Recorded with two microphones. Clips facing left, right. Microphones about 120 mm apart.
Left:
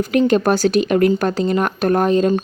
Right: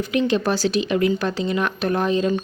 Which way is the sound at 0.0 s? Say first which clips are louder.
Left 5 dB; 45° left (ahead or behind).